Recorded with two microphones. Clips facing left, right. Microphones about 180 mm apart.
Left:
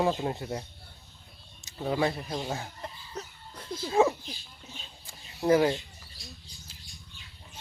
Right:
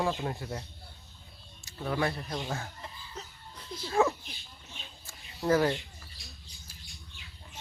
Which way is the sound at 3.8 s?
20° left (ahead or behind).